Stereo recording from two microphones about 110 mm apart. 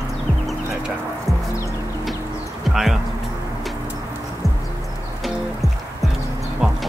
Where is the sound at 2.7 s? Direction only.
5° right (ahead or behind).